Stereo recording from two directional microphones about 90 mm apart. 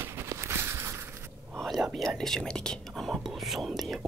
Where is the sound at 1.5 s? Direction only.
Centre (ahead or behind).